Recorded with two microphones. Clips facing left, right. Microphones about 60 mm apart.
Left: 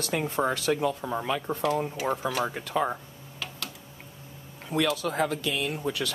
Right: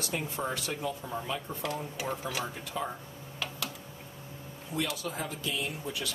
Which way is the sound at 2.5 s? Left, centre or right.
Left.